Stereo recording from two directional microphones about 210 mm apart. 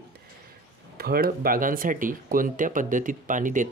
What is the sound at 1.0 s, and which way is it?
Speech, 45° right (ahead or behind).